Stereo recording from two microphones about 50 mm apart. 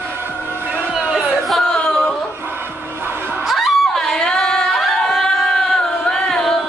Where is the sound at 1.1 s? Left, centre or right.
Centre.